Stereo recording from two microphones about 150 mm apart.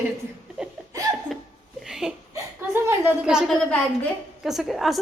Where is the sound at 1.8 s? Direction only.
5° right (ahead or behind).